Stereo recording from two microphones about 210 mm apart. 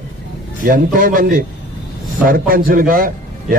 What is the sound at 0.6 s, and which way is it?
A man's voice, 40° right (ahead or behind).